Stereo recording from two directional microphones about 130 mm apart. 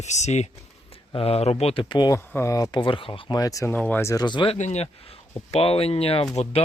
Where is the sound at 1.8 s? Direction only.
35° left (ahead or behind).